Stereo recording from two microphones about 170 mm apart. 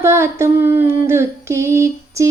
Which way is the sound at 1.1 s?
15° right (ahead or behind).